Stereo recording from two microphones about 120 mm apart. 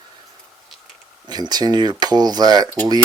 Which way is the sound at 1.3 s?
35° right (ahead or behind).